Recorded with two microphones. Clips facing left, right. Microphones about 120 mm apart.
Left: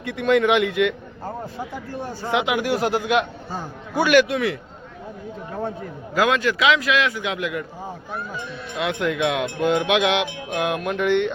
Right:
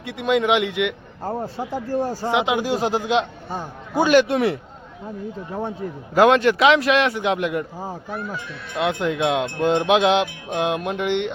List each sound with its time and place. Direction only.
0.0 s a man's voice: 15° right (ahead or behind)
1.2 s speech: 35° right (ahead or behind)
2.3 s a man's voice: 25° right (ahead or behind)
6.1 s speech: 35° right (ahead or behind)
8.7 s speech: 30° right (ahead or behind)